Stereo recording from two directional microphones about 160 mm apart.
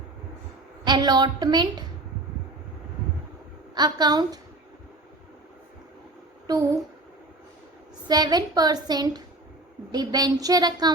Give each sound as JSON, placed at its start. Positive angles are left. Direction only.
{"t": 0.9, "sound": "a woman's voice", "side_deg": -25}
{"t": 3.8, "sound": "a woman's voice", "side_deg": -25}
{"t": 6.5, "sound": "a woman's voice", "side_deg": -25}
{"t": 8.0, "sound": "a woman's voice", "side_deg": -25}